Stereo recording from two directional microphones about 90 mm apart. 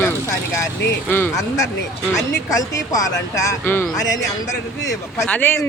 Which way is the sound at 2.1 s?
40° left (ahead or behind).